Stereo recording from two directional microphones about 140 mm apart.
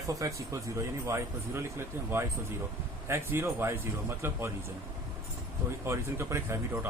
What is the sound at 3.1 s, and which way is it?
Speech, 15° right (ahead or behind).